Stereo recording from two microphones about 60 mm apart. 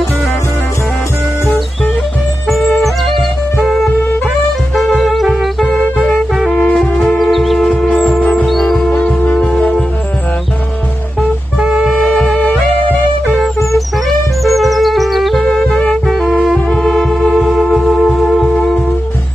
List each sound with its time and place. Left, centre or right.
2.4 s music: centre
4.7 s music: centre
8.2 s music: left
8.5 s music: centre
8.9 s music: left
11.6 s music: centre
11.9 s music: centre
13.7 s music: centre
16.1 s music: centre